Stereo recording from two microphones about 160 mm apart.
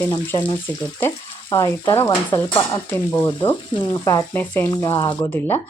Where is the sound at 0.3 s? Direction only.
30° left (ahead or behind).